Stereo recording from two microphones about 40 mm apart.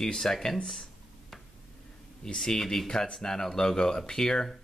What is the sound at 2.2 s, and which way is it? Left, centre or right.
Speech, centre.